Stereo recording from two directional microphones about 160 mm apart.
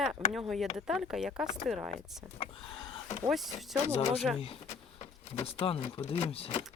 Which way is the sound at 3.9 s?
40° left (ahead or behind).